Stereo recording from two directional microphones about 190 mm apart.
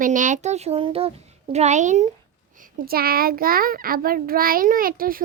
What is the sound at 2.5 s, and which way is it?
A child's voice, 50° right (ahead or behind).